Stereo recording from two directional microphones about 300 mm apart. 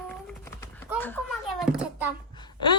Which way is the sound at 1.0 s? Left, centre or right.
Centre.